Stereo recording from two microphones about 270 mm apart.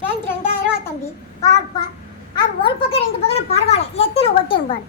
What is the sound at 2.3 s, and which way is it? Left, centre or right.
A child's voice, centre.